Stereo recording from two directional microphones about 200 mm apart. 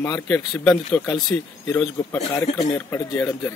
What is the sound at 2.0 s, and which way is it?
Speech, 15° left (ahead or behind).